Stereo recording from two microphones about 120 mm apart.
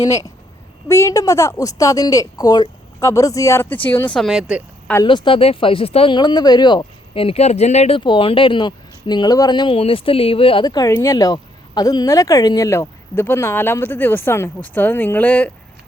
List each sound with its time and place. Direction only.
0.0 s speech: 30° left (ahead or behind)
4.2 s speech: 5° right (ahead or behind)
5.0 s speech: 40° left (ahead or behind)
6.1 s speech: 35° left (ahead or behind)
7.1 s speech: 50° left (ahead or behind)
7.9 s speech: 45° left (ahead or behind)
10.7 s speech: 30° left (ahead or behind); by 15.4 s 15° left (ahead or behind)